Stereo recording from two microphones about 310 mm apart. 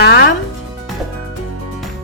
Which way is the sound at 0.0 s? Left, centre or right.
Left.